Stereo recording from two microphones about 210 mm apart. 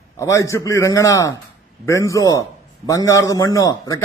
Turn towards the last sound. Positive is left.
turn(degrees=15)  # may be behind; listen again after turning